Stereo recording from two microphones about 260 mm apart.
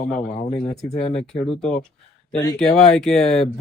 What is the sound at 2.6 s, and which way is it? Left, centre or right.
Speech, centre.